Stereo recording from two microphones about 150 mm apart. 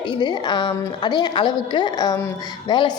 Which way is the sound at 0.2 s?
30° left (ahead or behind).